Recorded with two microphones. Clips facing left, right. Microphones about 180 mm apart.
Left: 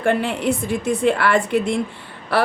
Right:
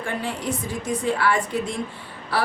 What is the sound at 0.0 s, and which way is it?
A woman's voice, 80° left.